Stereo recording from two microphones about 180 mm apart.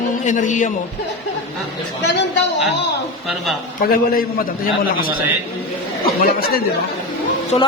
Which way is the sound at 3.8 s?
55° left (ahead or behind).